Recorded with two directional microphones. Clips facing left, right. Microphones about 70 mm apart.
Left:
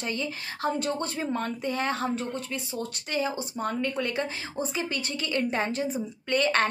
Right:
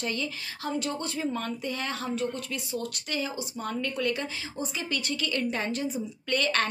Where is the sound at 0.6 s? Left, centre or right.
Left.